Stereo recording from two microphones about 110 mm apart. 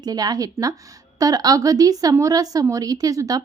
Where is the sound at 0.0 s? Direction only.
35° right (ahead or behind).